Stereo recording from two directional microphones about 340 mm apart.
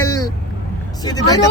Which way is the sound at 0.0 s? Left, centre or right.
Centre.